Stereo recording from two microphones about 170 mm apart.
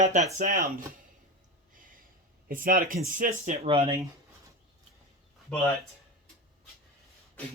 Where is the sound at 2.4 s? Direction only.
55° right (ahead or behind).